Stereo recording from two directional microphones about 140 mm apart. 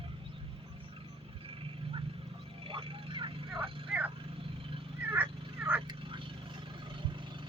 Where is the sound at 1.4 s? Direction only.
40° right (ahead or behind).